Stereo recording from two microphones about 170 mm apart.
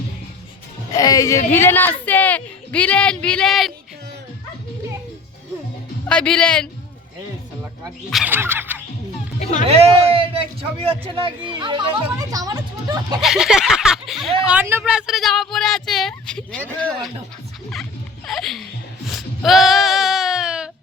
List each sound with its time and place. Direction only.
0.9 s speech: 20° left (ahead or behind); by 3.7 s centre (ahead or behind)
6.1 s speech: 5° left (ahead or behind)
8.1 s speech: 10° right (ahead or behind)
9.6 s a man's voice: 35° right (ahead or behind)
13.2 s speech: 5° right (ahead or behind)
18.3 s bleat: centre (ahead or behind)